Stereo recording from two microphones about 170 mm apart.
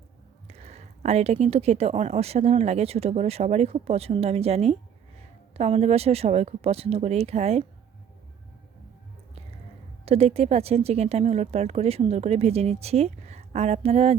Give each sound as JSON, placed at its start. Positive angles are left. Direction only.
{"t": 0.4, "sound": "speech", "side_deg": -40}
{"t": 10.1, "sound": "speech", "side_deg": -35}